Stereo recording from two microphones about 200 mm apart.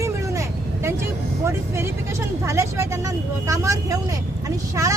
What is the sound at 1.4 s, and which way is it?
Speech, 15° right (ahead or behind).